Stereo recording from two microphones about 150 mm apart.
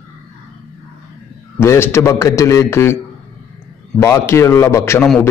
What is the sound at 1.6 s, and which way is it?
A man's voice, 15° left (ahead or behind).